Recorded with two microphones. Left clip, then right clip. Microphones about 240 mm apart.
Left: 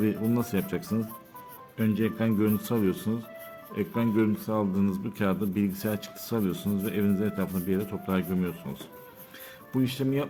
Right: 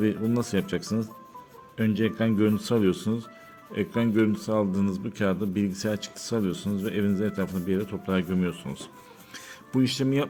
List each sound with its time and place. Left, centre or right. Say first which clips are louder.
0.0 s speech: right 2 dB; centre
9.7 s speech: right 3 dB; right